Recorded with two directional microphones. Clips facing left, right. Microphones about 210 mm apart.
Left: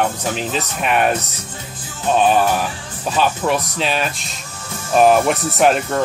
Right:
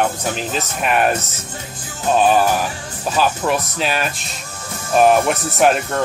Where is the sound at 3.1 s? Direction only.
Centre (ahead or behind).